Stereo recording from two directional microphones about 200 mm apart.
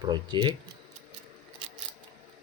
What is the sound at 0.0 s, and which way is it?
Speech, 20° right (ahead or behind).